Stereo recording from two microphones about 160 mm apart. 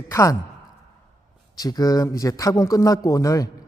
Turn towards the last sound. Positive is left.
turn(degrees=20)  # may be behind; listen again after turning